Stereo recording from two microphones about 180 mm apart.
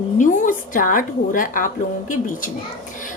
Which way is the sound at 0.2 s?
45° left (ahead or behind).